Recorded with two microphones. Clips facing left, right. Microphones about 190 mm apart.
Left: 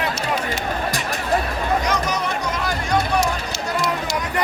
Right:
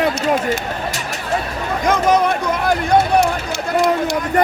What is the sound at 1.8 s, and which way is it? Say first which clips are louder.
Speech: right 7 dB; 55° right (ahead or behind).